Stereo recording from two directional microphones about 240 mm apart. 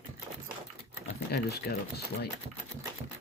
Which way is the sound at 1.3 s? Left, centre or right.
Left.